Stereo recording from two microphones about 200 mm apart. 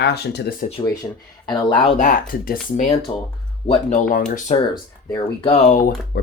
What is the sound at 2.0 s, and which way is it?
Speech, 45° left (ahead or behind).